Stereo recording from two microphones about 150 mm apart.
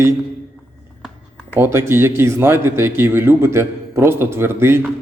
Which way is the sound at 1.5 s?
15° right (ahead or behind).